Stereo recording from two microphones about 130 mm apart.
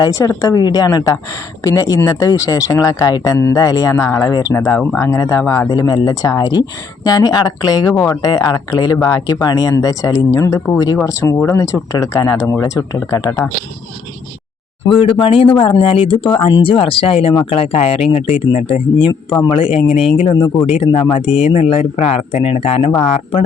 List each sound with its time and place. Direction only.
0.0 s speech: 25° left (ahead or behind)
14.8 s speech: 40° left (ahead or behind)
15.5 s speech: 30° left (ahead or behind)
15.8 s speech: 45° left (ahead or behind)